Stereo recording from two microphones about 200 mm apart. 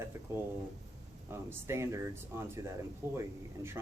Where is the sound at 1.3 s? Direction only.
10° right (ahead or behind).